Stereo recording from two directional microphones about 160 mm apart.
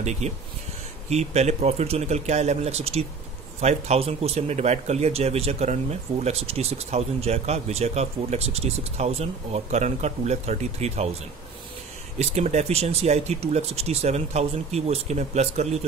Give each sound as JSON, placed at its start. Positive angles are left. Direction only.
{"t": 0.0, "sound": "speech", "side_deg": -45}
{"t": 12.2, "sound": "speech", "side_deg": -45}